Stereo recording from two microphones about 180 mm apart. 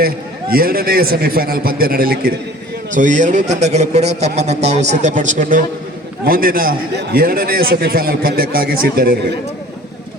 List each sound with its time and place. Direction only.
0.0 s a man's voice: 55° right (ahead or behind)
2.9 s a man's voice: 45° right (ahead or behind)